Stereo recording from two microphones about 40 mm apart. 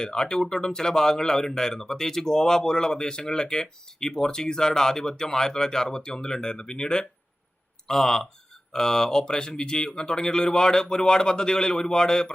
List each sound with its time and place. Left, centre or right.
0.0 s speech: centre